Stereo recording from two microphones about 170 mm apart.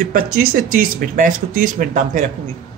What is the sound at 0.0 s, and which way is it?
Speech, 60° right (ahead or behind).